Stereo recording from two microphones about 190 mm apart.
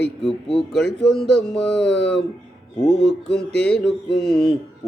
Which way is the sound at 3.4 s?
5° left (ahead or behind).